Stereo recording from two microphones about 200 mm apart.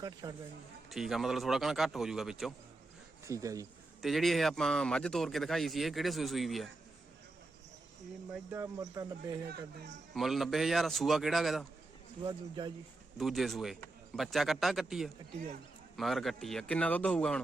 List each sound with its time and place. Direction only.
0.0 s speech: 20° right (ahead or behind)
0.9 s speech: centre (ahead or behind)
3.2 s speech: 15° right (ahead or behind)
4.0 s speech: centre (ahead or behind)
8.3 s speech: 10° right (ahead or behind)
10.2 s speech: centre (ahead or behind)
12.2 s speech: 20° right (ahead or behind)
13.1 s speech: centre (ahead or behind)